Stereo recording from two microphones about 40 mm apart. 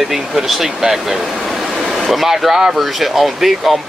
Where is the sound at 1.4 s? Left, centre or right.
Centre.